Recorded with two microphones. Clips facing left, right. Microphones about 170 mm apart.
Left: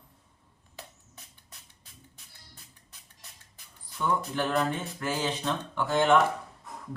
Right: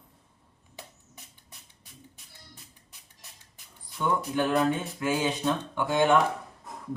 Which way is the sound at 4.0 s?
15° right (ahead or behind).